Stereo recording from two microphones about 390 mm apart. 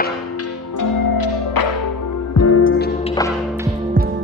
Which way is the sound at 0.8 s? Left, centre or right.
Left.